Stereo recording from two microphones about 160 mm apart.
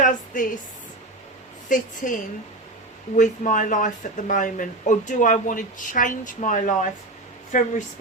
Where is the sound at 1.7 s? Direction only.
55° left (ahead or behind).